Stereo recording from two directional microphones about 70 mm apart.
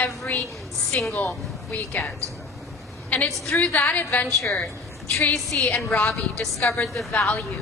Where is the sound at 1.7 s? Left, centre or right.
Centre.